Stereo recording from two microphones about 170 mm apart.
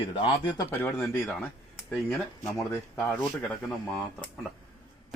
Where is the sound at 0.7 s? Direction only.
15° left (ahead or behind).